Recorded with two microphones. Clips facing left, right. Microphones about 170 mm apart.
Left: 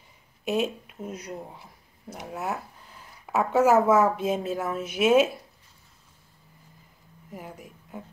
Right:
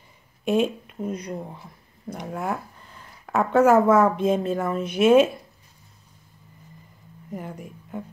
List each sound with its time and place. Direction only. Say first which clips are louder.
0.5 s speech: right 5 dB; 5° left (ahead or behind)
7.3 s speech: right 6 dB; 5° left (ahead or behind)